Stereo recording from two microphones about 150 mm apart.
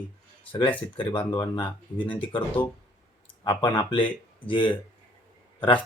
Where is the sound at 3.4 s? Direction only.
35° left (ahead or behind).